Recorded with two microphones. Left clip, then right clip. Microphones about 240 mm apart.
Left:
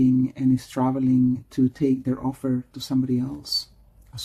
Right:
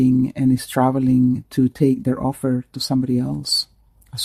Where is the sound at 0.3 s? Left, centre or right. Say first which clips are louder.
Right 5 dB; right.